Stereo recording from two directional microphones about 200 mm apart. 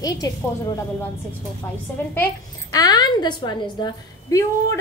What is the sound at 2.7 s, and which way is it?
A woman's voice, 20° left (ahead or behind).